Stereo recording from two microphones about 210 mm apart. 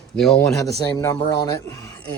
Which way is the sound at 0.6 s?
15° left (ahead or behind).